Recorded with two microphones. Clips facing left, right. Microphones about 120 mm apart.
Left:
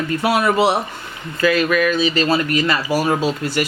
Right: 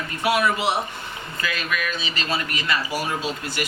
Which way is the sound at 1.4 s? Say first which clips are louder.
Left 12 dB; 45° left (ahead or behind).